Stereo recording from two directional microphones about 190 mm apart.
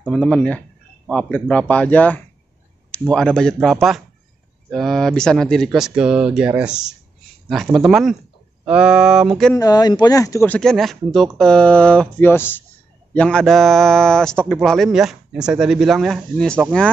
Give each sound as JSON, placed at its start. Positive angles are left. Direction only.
{"t": 0.0, "sound": "speech", "side_deg": 5}
{"t": 9.6, "sound": "speech", "side_deg": 20}